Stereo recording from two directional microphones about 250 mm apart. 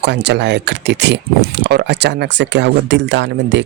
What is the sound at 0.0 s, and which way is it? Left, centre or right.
Speech, right.